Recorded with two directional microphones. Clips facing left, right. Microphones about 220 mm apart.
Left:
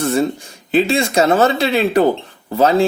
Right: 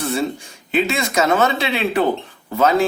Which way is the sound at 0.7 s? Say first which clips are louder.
Left 5 dB; 30° left (ahead or behind).